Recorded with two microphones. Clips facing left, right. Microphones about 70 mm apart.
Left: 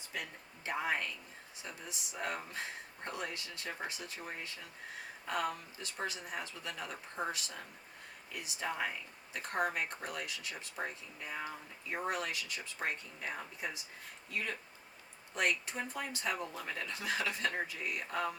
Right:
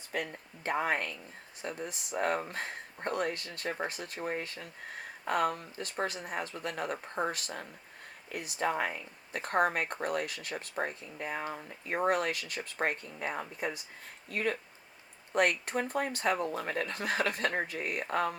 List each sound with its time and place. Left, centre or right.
0.1 s speech: right